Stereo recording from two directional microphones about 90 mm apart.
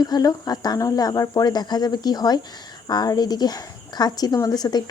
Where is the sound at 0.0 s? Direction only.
45° left (ahead or behind).